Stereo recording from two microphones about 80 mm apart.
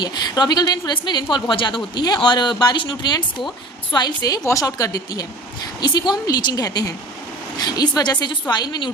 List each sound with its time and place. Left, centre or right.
0.0 s a woman's voice: left
4.4 s speech: left
5.8 s a woman's voice: left